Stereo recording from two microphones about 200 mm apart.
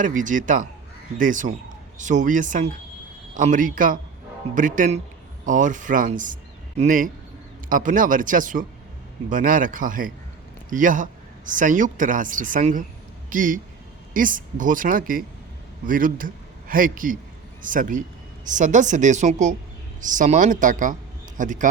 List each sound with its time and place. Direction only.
0.0 s a man's voice: 40° right (ahead or behind)